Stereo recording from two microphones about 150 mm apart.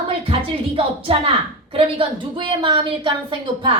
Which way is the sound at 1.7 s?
35° right (ahead or behind).